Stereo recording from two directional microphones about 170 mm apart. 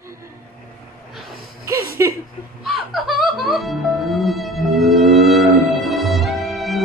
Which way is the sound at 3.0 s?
Centre (ahead or behind).